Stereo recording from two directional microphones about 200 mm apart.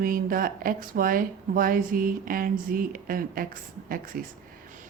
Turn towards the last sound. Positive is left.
turn(degrees=-45)  # may be behind; listen again after turning